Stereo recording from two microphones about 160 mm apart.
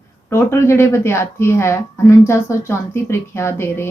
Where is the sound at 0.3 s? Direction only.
15° left (ahead or behind).